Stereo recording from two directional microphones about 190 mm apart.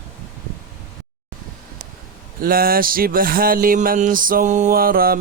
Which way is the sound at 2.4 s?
50° right (ahead or behind).